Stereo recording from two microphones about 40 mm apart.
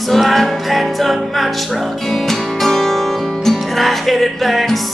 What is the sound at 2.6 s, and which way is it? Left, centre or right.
Music, centre.